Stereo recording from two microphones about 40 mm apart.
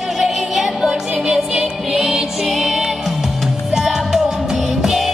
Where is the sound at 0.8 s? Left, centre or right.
Centre.